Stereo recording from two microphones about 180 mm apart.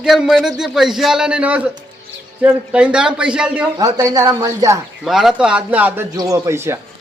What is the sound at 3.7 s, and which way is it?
Speech, 20° right (ahead or behind).